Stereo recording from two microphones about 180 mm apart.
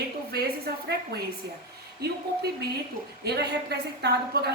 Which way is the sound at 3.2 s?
65° right (ahead or behind).